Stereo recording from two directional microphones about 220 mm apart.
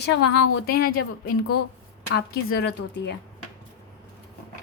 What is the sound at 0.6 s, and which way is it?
Speech, 45° left (ahead or behind).